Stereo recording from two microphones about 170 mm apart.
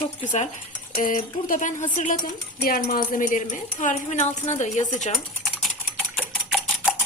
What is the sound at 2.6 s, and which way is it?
Speech, 60° left (ahead or behind).